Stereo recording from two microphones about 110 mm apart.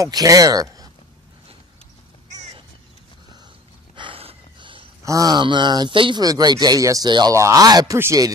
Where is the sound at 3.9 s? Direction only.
55° right (ahead or behind).